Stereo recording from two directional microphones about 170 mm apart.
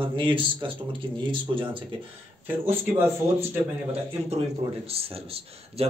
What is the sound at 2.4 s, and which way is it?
Speech, 10° right (ahead or behind).